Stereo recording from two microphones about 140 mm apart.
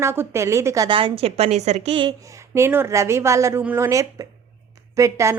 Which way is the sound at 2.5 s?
15° right (ahead or behind).